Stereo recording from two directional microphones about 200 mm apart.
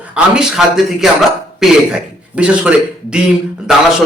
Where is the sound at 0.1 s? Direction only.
5° right (ahead or behind).